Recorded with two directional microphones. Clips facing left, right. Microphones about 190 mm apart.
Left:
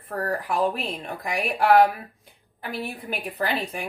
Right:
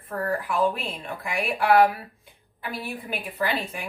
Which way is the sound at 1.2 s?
40° left (ahead or behind).